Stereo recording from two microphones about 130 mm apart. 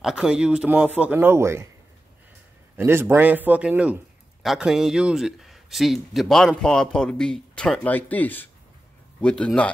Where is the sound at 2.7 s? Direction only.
20° right (ahead or behind).